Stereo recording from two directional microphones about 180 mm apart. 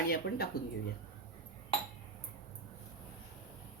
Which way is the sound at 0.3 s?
65° left (ahead or behind).